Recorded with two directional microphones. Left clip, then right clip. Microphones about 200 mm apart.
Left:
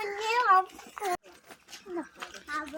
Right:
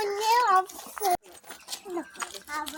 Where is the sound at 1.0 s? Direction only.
50° right (ahead or behind).